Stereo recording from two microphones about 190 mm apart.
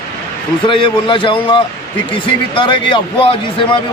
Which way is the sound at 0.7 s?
25° left (ahead or behind).